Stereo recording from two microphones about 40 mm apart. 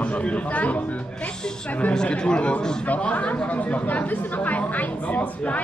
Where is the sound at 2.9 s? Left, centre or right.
Left.